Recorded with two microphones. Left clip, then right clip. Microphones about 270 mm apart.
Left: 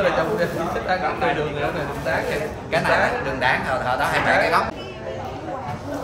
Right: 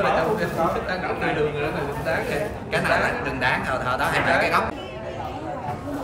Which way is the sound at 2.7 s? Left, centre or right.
Centre.